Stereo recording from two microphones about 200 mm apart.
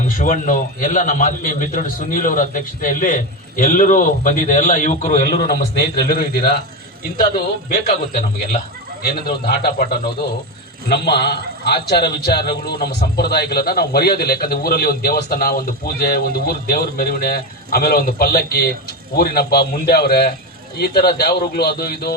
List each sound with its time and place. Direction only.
0.2 s a man's voice: 40° left (ahead or behind)
6.0 s a man's voice: 50° left (ahead or behind)
7.7 s a man's voice: 40° left (ahead or behind)